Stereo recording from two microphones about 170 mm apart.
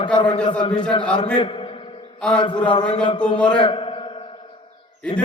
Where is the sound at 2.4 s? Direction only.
25° left (ahead or behind).